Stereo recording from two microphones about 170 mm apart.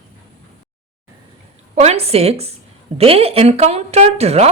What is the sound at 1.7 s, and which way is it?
A woman's voice, 40° right (ahead or behind).